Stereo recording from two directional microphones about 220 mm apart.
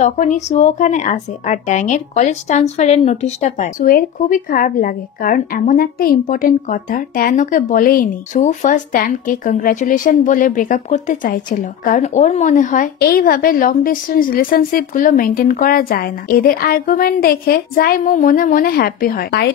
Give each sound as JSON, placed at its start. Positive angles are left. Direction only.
{"t": 0.0, "sound": "speech", "side_deg": 35}